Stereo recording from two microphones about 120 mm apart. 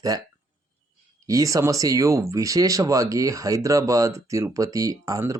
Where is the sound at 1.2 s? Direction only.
30° right (ahead or behind).